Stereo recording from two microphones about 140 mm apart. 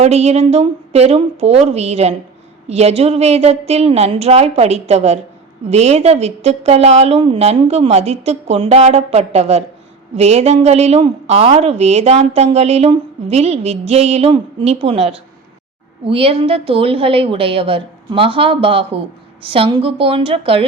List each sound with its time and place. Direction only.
0.0 s a woman's voice: 50° right (ahead or behind)